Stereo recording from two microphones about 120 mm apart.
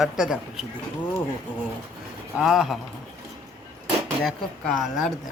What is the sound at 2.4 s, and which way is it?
Speech, 5° right (ahead or behind).